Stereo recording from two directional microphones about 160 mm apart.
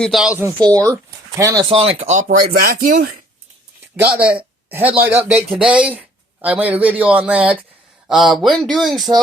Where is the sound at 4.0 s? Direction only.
10° right (ahead or behind).